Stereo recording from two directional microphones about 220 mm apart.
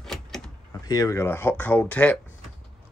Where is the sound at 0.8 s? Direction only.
15° left (ahead or behind).